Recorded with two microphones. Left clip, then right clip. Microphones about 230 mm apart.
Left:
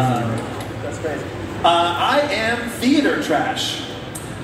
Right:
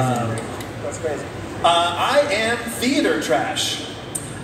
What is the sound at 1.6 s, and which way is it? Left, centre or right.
Music, right.